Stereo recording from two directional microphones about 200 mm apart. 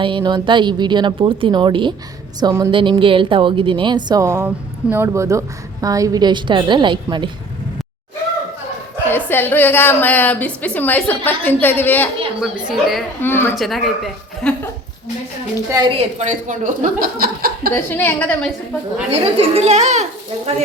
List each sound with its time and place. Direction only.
0.0 s a woman's voice: 25° right (ahead or behind)
9.0 s a woman's voice: 10° left (ahead or behind)
12.4 s speech: centre (ahead or behind)
13.2 s a woman's voice: 10° left (ahead or behind)
13.6 s speech: centre (ahead or behind)
15.7 s a woman's voice: 25° right (ahead or behind); by 17.7 s 45° right (ahead or behind)
17.9 s a woman's voice: 10° left (ahead or behind)
19.1 s a woman's voice: 30° right (ahead or behind)